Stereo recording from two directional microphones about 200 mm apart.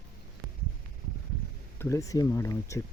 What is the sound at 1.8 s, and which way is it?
Speech, 15° left (ahead or behind).